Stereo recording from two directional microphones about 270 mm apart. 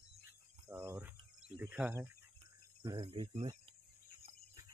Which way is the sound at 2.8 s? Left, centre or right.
Centre.